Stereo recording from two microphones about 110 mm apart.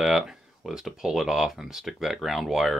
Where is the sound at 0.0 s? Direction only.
5° right (ahead or behind).